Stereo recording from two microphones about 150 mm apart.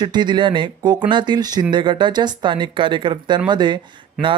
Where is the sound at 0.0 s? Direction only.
30° right (ahead or behind).